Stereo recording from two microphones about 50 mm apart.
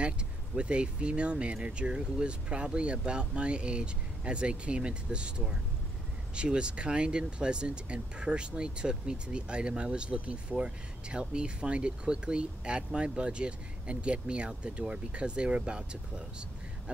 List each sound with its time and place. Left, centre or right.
0.6 s speech: right